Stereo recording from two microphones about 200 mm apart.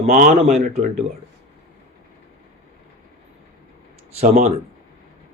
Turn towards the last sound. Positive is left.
turn(degrees=-35)  # may be behind; listen again after turning